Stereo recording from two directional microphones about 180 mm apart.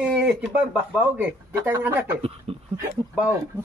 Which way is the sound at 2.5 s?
35° right (ahead or behind).